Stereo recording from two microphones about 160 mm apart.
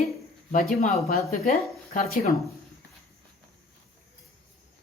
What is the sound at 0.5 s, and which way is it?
Speech, 55° left (ahead or behind).